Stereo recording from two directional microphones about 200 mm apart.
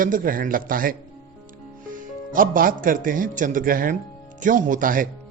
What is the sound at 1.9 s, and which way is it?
Speech, 45° right (ahead or behind).